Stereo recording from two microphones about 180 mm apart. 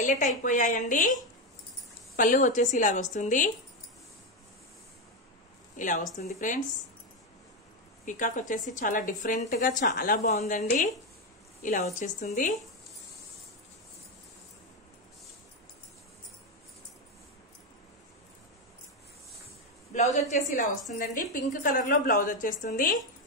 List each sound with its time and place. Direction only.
0.0 s a woman's voice: 45° left (ahead or behind)
5.8 s a woman's voice: 45° left (ahead or behind)
8.0 s a woman's voice: 45° left (ahead or behind)
19.9 s a woman's voice: 40° left (ahead or behind)